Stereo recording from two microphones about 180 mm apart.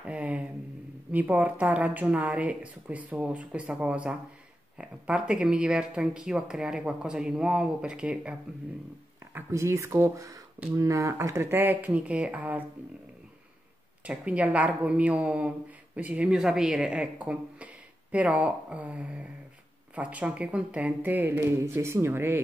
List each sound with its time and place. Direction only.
0.0 s speech: 10° right (ahead or behind)
14.0 s speech: 5° right (ahead or behind)